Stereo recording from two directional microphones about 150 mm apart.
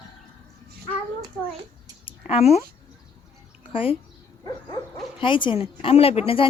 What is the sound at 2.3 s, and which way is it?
Speech, 45° left (ahead or behind).